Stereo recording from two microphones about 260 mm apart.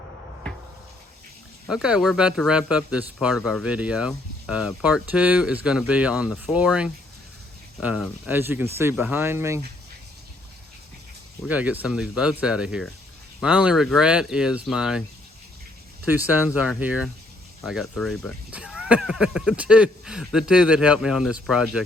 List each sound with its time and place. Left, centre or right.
1.6 s speech: centre
11.4 s speech: centre
16.0 s speech: centre